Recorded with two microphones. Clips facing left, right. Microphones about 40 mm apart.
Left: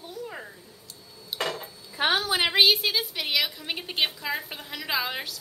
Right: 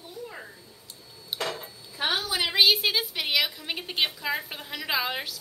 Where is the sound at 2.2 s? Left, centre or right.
Left.